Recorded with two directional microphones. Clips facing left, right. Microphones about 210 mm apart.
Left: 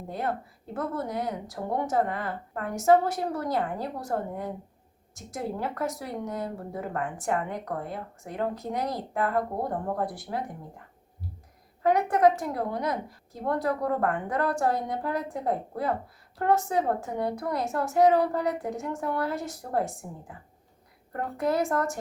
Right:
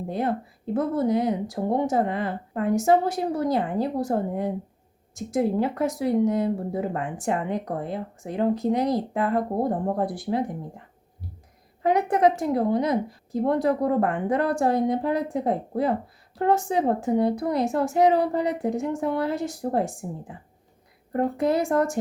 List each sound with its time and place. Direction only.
0.7 s speech: 20° right (ahead or behind)
11.8 s speech: 20° right (ahead or behind)
21.1 s speech: 20° right (ahead or behind)